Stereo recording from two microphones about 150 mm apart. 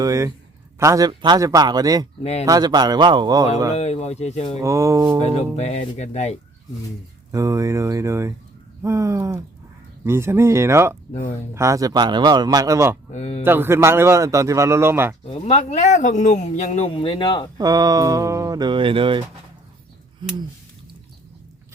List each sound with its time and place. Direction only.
0.0 s speech: 20° right (ahead or behind)
3.8 s speech: 45° left (ahead or behind)
4.6 s speech: 20° right (ahead or behind)
5.2 s speech: 45° left (ahead or behind)
7.3 s a man's voice: 20° right (ahead or behind)
13.1 s speech: 45° left (ahead or behind)
13.4 s a man's voice: 15° right (ahead or behind)
15.3 s speech: 40° left (ahead or behind)
17.6 s speech: 25° right (ahead or behind)